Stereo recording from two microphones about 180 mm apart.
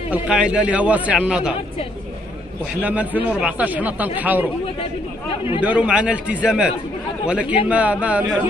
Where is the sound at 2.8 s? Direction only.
10° right (ahead or behind).